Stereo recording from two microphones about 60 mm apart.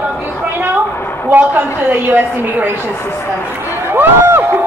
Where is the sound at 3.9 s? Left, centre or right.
Right.